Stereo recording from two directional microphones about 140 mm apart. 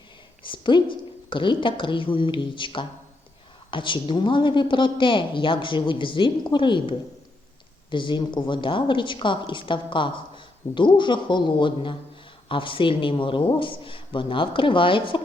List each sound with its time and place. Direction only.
0.4 s a woman's voice: 35° left (ahead or behind)